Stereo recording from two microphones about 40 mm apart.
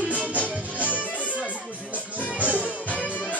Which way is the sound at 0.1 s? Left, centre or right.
Right.